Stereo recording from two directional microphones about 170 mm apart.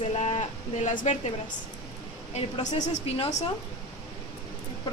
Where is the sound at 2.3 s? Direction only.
40° left (ahead or behind).